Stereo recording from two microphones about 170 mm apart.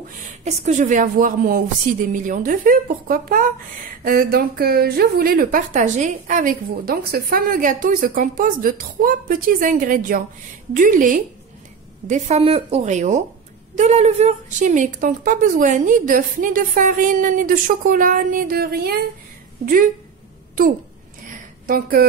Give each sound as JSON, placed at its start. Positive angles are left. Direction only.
{"t": 0.4, "sound": "a woman's voice", "side_deg": -40}
{"t": 12.1, "sound": "a woman's voice", "side_deg": -40}
{"t": 19.6, "sound": "a woman's voice", "side_deg": -55}
{"t": 21.6, "sound": "a woman's voice", "side_deg": -55}